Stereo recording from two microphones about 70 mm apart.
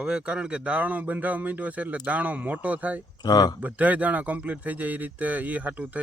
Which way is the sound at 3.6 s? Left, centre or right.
Right.